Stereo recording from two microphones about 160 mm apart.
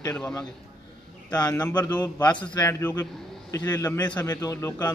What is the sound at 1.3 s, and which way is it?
A man's voice, 20° left (ahead or behind).